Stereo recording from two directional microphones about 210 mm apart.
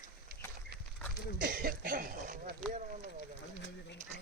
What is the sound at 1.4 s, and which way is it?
Cough, 45° right (ahead or behind).